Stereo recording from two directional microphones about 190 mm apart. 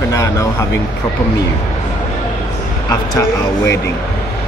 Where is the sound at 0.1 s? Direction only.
15° left (ahead or behind).